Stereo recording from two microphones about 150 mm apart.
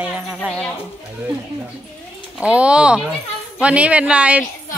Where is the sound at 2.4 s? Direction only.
10° right (ahead or behind).